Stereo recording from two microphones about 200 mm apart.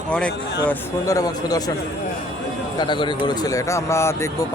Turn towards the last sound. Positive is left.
turn(degrees=15)  # may be behind; listen again after turning